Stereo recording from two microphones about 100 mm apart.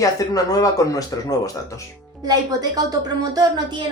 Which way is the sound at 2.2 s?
40° right (ahead or behind).